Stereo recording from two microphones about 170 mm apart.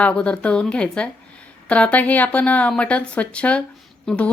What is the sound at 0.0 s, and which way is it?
Speech, 5° left (ahead or behind).